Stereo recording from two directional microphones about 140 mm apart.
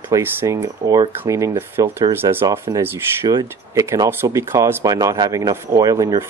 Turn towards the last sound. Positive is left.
turn(degrees=-25)  # may be behind; listen again after turning